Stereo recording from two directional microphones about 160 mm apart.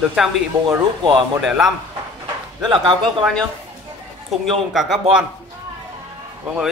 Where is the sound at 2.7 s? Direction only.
30° right (ahead or behind).